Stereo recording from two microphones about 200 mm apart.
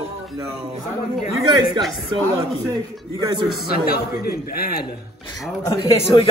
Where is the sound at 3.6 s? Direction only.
50° left (ahead or behind).